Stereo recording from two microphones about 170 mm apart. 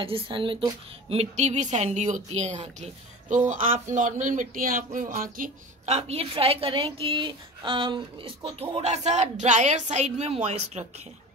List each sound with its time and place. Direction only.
0.0 s a woman's voice: 30° right (ahead or behind)